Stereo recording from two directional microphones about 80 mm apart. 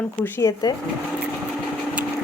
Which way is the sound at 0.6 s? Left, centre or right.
Left.